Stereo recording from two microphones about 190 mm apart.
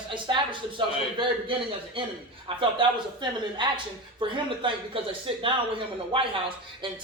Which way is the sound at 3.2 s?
25° right (ahead or behind).